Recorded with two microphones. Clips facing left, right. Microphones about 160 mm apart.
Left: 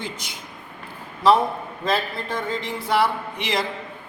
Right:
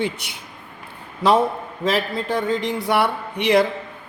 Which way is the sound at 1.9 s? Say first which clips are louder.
Right 3 dB; 75° right (ahead or behind).